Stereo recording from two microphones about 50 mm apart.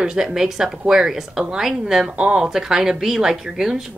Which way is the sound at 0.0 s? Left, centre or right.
Centre.